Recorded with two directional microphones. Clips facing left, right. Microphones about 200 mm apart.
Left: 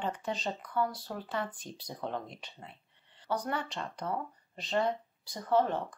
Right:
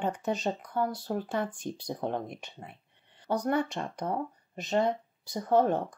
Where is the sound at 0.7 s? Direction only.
45° right (ahead or behind).